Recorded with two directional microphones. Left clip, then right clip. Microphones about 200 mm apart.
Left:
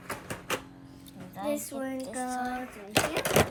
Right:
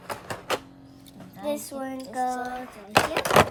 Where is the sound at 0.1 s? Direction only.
50° right (ahead or behind).